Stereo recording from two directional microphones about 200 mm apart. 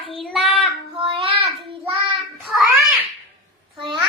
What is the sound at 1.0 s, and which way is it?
Child singing, 25° right (ahead or behind).